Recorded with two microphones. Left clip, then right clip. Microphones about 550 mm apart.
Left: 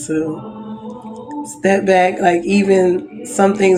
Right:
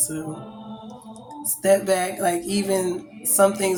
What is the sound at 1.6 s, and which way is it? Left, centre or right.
Speech, right.